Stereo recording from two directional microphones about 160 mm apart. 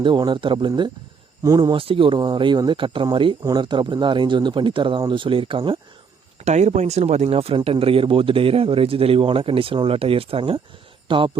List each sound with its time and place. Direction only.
0.0 s speech: 30° right (ahead or behind)
6.4 s speech: 45° right (ahead or behind)